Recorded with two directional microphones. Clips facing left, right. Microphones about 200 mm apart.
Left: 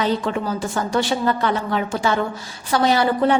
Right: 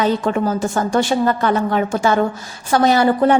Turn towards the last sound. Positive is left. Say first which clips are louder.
# right 4 dB
turn(degrees=-45)  # may be behind; listen again after turning